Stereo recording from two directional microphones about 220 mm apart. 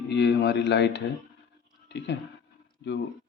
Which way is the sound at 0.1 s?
50° left (ahead or behind).